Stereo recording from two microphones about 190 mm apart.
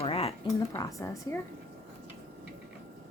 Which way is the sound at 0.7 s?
15° left (ahead or behind).